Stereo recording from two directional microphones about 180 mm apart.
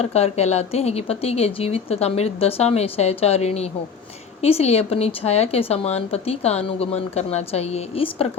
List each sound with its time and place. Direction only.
0.0 s a woman's voice: 35° left (ahead or behind)